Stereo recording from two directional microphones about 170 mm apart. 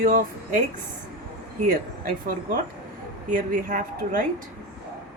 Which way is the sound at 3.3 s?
50° right (ahead or behind).